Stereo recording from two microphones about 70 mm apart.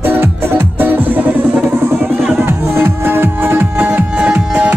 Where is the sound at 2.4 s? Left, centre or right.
Right.